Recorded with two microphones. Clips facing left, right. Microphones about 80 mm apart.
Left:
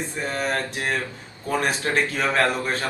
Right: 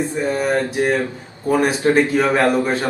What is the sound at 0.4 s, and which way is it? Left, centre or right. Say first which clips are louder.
Speech: right 8 dB; centre.